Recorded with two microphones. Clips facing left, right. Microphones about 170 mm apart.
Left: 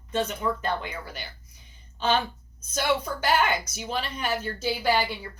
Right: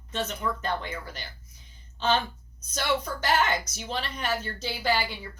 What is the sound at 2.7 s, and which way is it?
Speech, 10° left (ahead or behind).